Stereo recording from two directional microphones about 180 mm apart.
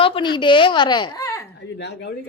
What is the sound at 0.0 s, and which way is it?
Speech, 30° left (ahead or behind).